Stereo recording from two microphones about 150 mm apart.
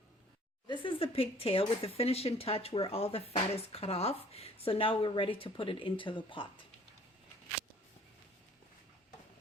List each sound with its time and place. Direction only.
0.7 s speech: 35° left (ahead or behind)